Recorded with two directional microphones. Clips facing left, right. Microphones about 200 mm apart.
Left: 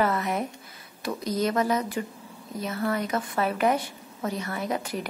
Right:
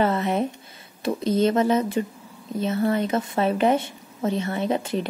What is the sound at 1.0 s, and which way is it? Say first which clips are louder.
A woman's voice: right 6 dB; 25° right (ahead or behind).